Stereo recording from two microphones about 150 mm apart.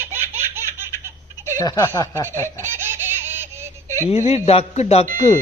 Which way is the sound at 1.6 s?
20° left (ahead or behind).